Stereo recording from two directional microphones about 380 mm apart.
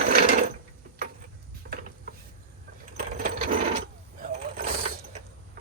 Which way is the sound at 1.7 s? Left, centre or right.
Right.